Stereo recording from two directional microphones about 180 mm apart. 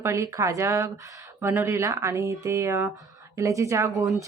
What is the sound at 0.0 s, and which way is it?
A woman's voice, 15° right (ahead or behind).